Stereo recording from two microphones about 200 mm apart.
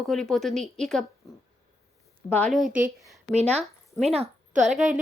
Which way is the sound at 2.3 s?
5° left (ahead or behind).